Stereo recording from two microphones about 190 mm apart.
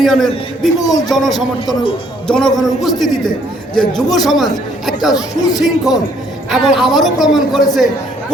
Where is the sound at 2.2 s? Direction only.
5° left (ahead or behind).